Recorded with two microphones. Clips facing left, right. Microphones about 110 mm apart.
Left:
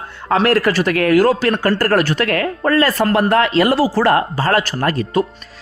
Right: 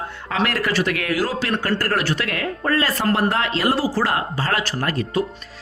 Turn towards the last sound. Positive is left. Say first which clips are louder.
# left 5 dB
turn(degrees=50)  # may be behind; listen again after turning